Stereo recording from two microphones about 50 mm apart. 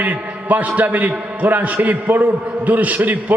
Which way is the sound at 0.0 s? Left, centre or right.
Right.